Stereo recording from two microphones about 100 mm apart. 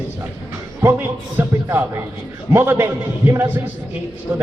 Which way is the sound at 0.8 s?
25° right (ahead or behind).